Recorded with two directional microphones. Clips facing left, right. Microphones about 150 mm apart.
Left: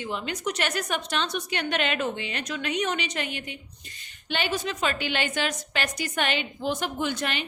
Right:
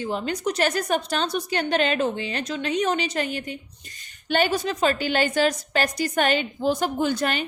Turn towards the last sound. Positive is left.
turn(degrees=-40)  # may be behind; listen again after turning